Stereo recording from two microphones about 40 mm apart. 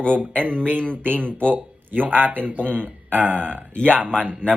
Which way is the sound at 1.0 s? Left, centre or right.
Right.